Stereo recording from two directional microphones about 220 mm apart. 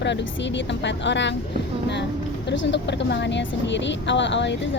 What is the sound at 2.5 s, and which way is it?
Speech, 55° left (ahead or behind).